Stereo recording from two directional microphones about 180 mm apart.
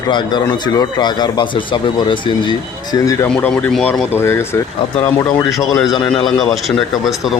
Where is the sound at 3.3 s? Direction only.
5° left (ahead or behind).